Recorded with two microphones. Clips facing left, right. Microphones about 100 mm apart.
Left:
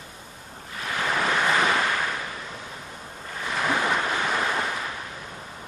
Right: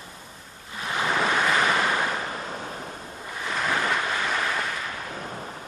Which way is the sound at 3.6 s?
10° left (ahead or behind).